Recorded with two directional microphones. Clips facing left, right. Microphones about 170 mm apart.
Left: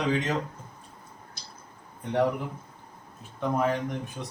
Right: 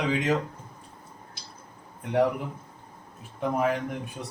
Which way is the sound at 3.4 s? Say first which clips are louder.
Right 1 dB; 10° right (ahead or behind).